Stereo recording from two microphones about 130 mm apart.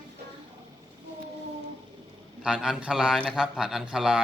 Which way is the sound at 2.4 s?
5° right (ahead or behind).